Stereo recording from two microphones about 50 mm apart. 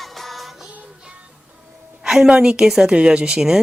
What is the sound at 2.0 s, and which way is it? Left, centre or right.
A woman's voice, centre.